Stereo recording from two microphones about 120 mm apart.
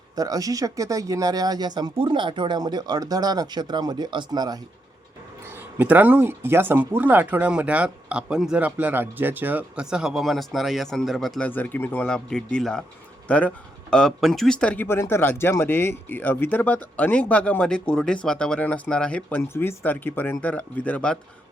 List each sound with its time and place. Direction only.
0.2 s speech: 30° right (ahead or behind)
5.5 s speech: 15° right (ahead or behind); by 11.4 s centre (ahead or behind)
11.4 s speech: 15° left (ahead or behind)